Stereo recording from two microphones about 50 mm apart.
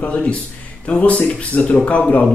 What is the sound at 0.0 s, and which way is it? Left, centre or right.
Speech, left.